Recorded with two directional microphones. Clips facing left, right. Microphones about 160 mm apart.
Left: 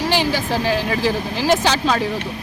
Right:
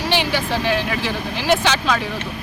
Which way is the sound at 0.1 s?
40° left (ahead or behind).